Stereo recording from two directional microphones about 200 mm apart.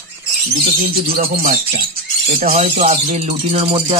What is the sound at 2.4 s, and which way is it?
Music, 40° right (ahead or behind).